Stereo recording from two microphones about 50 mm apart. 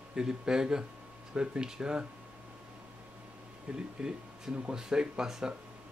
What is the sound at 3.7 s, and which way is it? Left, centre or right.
Speech, centre.